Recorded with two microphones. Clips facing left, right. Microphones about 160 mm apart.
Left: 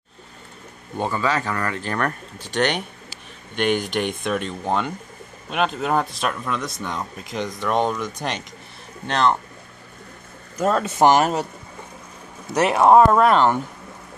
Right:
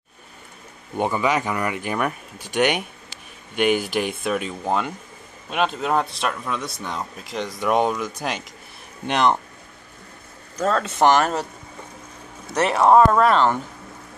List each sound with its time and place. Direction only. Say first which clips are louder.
0.9 s speech: right 2 dB; 15° right (ahead or behind)
9.0 s speech: even; 15° right (ahead or behind)
10.6 s speech: left 1 dB; 10° left (ahead or behind)
12.6 s speech: left 1 dB; 10° left (ahead or behind)